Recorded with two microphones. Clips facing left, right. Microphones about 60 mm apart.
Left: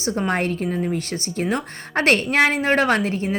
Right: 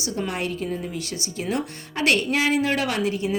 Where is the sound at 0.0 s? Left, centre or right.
Left.